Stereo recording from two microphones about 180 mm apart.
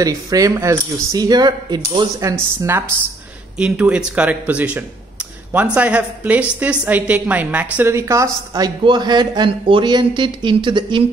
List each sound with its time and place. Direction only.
0.0 s a woman's voice: 20° right (ahead or behind)